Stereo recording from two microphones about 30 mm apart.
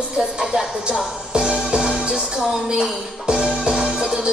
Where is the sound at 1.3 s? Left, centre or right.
Right.